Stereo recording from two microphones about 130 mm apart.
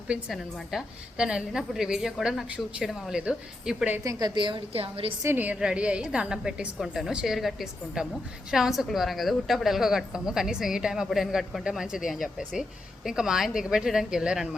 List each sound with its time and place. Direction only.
0.1 s a woman's voice: 5° right (ahead or behind)
4.0 s a woman's voice: 30° right (ahead or behind); by 5.1 s 45° right (ahead or behind)
5.2 s a woman's voice: 15° right (ahead or behind)